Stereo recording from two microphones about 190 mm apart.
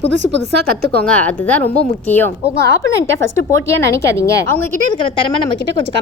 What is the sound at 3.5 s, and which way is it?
A woman's voice, 15° left (ahead or behind).